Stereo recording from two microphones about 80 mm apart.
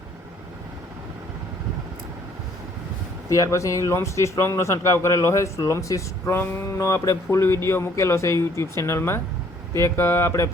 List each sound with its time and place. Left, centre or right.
3.2 s speech: left
6.2 s a sound: left
6.7 s speech: left